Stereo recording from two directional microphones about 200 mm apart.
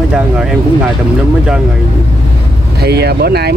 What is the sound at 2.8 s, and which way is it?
Speech, 55° right (ahead or behind).